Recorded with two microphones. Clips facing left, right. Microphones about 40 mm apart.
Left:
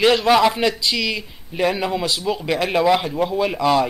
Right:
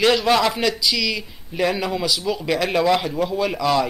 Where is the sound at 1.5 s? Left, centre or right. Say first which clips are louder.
Left 1 dB; centre.